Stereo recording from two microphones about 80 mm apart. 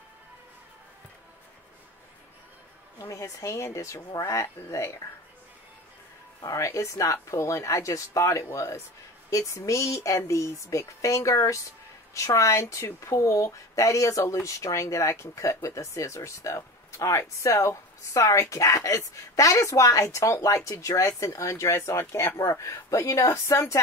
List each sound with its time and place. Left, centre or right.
3.0 s speech: left
6.4 s speech: left